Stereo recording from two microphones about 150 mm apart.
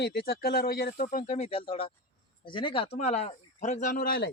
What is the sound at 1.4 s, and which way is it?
Speech, 40° left (ahead or behind).